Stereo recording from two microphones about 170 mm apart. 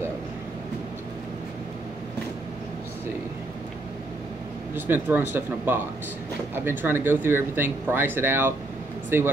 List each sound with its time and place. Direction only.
4.7 s speech: 10° right (ahead or behind)